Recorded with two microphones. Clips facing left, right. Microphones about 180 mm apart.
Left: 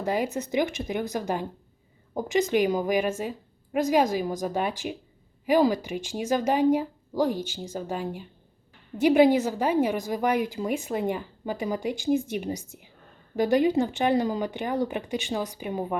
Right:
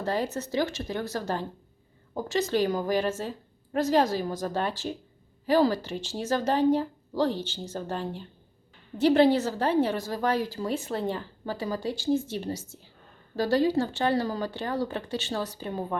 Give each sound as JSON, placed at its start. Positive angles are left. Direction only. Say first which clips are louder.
{"t": 0.0, "sound": "a woman's voice", "louder": "left 2 dB", "side_deg": 15}